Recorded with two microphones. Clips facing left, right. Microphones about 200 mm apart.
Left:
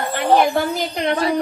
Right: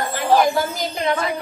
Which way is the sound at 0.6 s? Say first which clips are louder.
Left 2 dB; 60° left (ahead or behind).